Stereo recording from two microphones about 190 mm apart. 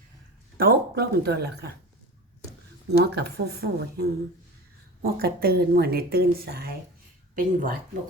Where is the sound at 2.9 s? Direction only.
60° right (ahead or behind).